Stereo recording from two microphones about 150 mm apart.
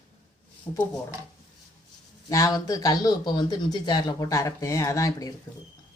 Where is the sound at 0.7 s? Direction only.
25° left (ahead or behind).